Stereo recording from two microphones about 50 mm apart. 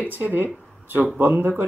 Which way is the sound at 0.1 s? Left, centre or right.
Right.